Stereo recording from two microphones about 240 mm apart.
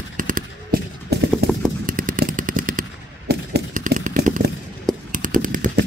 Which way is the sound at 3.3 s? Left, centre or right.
Right.